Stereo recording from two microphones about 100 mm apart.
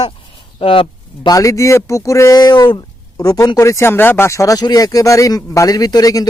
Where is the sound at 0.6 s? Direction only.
60° left (ahead or behind).